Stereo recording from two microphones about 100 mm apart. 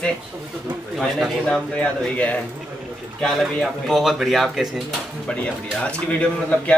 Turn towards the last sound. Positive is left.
turn(degrees=10)  # may be behind; listen again after turning